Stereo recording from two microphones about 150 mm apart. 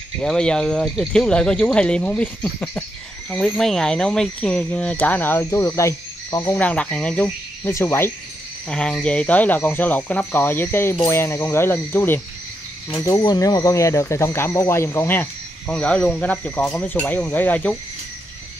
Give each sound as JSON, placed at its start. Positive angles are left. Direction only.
{"t": 0.2, "sound": "speech", "side_deg": 5}
{"t": 8.6, "sound": "speech", "side_deg": 5}